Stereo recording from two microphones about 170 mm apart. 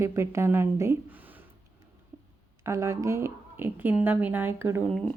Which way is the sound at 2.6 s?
15° right (ahead or behind).